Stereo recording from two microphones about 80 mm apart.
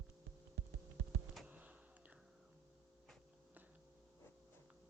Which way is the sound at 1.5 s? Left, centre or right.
Centre.